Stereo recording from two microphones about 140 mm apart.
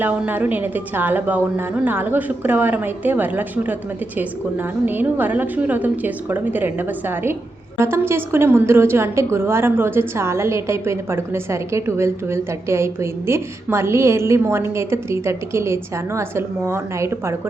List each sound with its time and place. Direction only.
0.0 s a woman's voice: 15° right (ahead or behind)